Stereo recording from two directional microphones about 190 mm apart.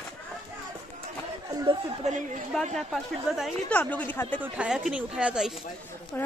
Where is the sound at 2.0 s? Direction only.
35° right (ahead or behind).